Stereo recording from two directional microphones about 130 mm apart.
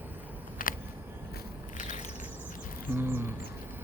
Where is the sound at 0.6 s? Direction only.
90° left.